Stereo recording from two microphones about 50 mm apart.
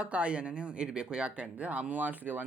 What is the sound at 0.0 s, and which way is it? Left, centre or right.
Speech, right.